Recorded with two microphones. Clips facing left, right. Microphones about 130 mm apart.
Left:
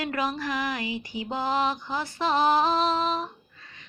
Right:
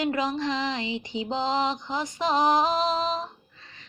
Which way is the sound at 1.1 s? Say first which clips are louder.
Right 1 dB; 20° right (ahead or behind).